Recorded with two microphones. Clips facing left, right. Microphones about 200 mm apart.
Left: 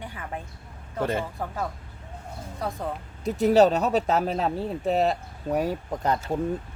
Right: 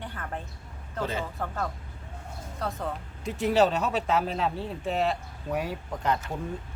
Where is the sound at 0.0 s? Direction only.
10° left (ahead or behind).